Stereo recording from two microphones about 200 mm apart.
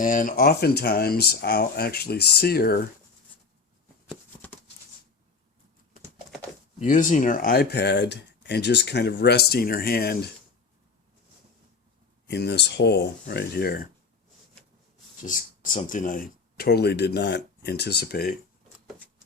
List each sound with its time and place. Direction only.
0.0 s speech: 40° left (ahead or behind)
6.7 s speech: 40° left (ahead or behind)
12.3 s speech: 55° left (ahead or behind)
15.2 s speech: 40° left (ahead or behind)